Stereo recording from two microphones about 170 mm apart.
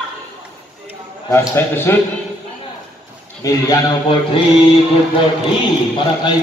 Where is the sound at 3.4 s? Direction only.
20° left (ahead or behind).